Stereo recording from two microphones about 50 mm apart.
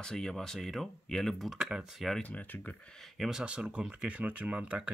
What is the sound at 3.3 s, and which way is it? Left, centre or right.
Speech, centre.